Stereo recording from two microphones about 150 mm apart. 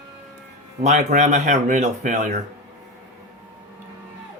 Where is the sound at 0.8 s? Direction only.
50° right (ahead or behind).